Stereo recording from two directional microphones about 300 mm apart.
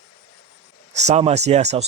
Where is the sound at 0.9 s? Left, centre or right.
Right.